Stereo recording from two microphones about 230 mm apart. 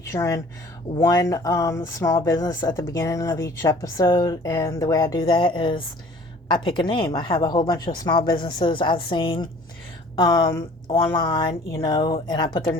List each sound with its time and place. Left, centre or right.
0.0 s speech: centre